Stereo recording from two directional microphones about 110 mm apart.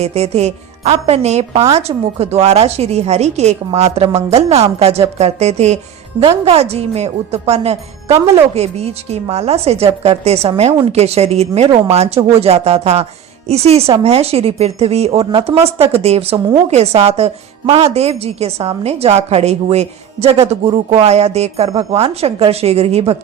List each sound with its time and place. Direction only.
0.0 s a woman's voice: 75° right (ahead or behind)
6.2 s a woman's voice: 70° right (ahead or behind)